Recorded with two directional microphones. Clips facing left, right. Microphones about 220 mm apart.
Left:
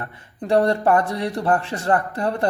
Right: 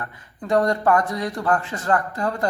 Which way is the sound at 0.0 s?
30° left (ahead or behind).